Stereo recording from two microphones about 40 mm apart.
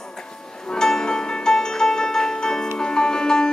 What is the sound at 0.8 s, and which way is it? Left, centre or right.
Music, centre.